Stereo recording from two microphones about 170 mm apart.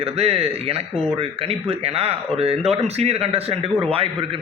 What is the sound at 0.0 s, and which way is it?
A man's voice, 35° right (ahead or behind).